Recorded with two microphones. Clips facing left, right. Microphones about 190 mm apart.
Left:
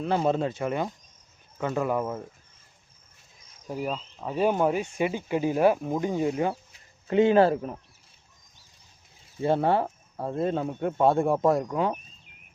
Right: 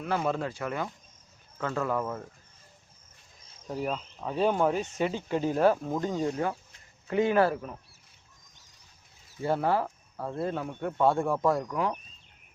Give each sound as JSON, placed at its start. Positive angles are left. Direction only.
{"t": 0.0, "sound": "speech", "side_deg": 25}
{"t": 3.7, "sound": "speech", "side_deg": 5}
{"t": 7.1, "sound": "speech", "side_deg": 25}
{"t": 9.4, "sound": "speech", "side_deg": 25}